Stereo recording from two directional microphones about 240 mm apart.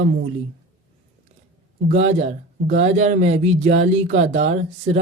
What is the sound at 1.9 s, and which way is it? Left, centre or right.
Speech, right.